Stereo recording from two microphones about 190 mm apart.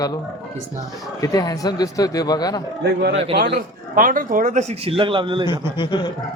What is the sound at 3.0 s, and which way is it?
A man's voice, 65° right (ahead or behind).